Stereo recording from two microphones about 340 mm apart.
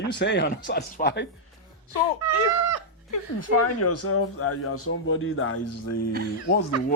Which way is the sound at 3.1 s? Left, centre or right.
Left.